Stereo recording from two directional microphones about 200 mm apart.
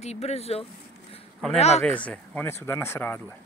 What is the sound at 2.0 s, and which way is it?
Speech, 10° left (ahead or behind).